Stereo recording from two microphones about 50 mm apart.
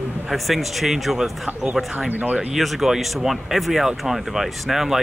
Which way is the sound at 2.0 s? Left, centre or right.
Right.